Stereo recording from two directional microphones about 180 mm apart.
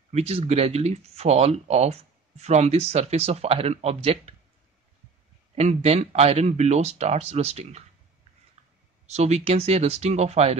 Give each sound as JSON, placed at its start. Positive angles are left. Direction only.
{"t": 0.1, "sound": "speech", "side_deg": -35}
{"t": 5.5, "sound": "speech", "side_deg": -35}
{"t": 9.0, "sound": "speech", "side_deg": -35}